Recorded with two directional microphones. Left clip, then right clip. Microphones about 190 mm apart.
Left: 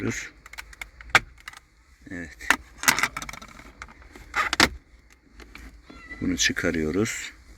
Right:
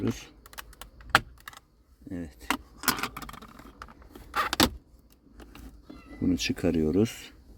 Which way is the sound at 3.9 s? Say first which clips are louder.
Left 3 dB; 15° right (ahead or behind).